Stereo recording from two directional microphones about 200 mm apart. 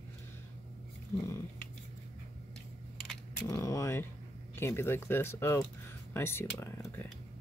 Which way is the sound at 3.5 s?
15° left (ahead or behind).